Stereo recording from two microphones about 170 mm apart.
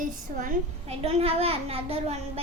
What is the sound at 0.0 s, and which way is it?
Speech, 50° right (ahead or behind).